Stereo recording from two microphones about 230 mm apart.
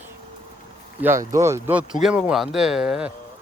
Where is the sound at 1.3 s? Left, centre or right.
Centre.